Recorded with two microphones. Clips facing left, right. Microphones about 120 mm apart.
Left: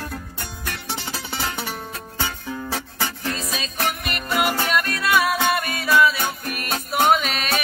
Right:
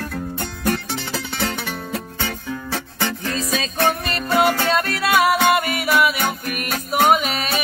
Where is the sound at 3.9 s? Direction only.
30° right (ahead or behind).